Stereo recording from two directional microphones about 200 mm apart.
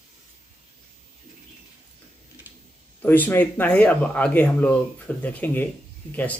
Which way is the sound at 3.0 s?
10° left (ahead or behind).